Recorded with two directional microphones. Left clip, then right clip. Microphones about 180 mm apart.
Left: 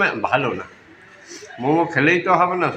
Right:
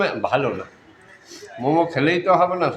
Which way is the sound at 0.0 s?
20° right (ahead or behind).